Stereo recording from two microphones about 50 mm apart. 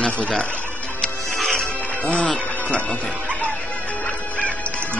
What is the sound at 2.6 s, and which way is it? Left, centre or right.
Music, centre.